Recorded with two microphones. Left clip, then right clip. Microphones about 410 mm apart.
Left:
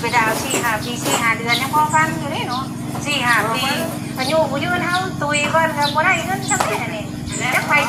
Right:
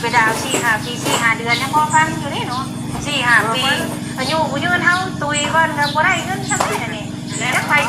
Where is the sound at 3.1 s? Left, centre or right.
Left.